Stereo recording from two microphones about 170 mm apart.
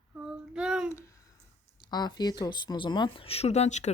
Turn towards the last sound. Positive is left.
turn(degrees=40)  # may be behind; listen again after turning